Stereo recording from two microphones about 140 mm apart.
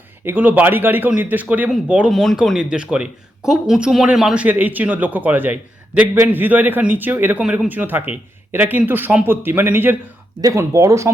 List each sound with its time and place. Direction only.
0.3 s speech: 10° right (ahead or behind)